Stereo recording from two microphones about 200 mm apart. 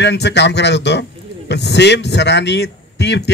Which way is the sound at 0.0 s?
60° left (ahead or behind).